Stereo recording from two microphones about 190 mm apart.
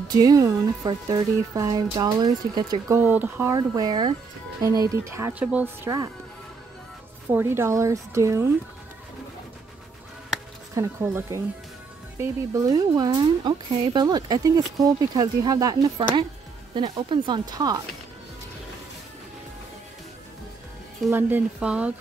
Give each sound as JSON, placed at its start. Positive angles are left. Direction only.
{"t": 0.1, "sound": "speech", "side_deg": -20}
{"t": 3.0, "sound": "speech", "side_deg": -10}
{"t": 7.2, "sound": "speech", "side_deg": -15}
{"t": 10.7, "sound": "speech", "side_deg": -15}
{"t": 21.1, "sound": "speech", "side_deg": -10}